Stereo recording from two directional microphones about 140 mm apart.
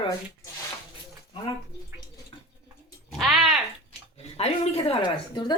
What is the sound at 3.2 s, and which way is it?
Bathtub, 5° right (ahead or behind).